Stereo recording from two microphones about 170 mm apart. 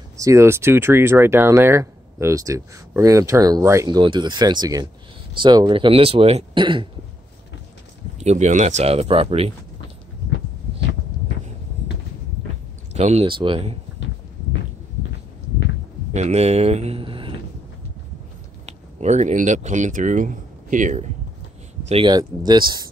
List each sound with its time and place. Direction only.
0.2 s speech: 15° right (ahead or behind)
8.2 s speech: 40° right (ahead or behind)
12.9 s speech: 40° right (ahead or behind)
16.2 s speech: 40° right (ahead or behind)
18.7 s speech: 40° right (ahead or behind)
21.8 s speech: 35° right (ahead or behind)